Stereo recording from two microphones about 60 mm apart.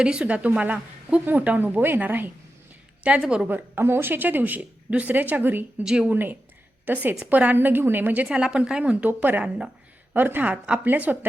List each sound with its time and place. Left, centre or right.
0.0 s a woman's voice: centre; by 2.3 s right
3.1 s a woman's voice: centre
3.4 s speech: right
5.8 s a woman's voice: centre
6.1 s a woman's voice: right
8.3 s a woman's voice: centre